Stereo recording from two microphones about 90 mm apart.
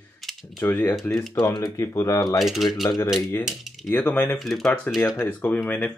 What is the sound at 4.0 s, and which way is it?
Speech, 20° left (ahead or behind).